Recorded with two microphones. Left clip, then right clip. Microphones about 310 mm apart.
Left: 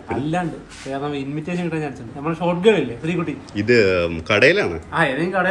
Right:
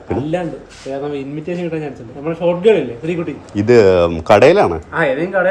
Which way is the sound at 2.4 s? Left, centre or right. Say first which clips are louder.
Right 7 dB; left.